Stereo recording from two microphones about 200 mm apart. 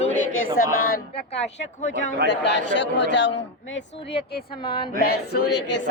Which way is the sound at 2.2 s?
60° left (ahead or behind).